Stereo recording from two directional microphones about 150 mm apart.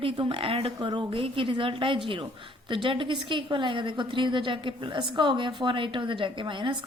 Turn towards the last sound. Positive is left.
turn(degrees=-30)  # may be behind; listen again after turning